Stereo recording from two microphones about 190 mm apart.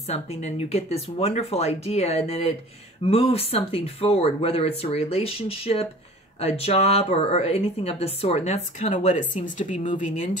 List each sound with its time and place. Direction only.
0.1 s speech: 35° left (ahead or behind)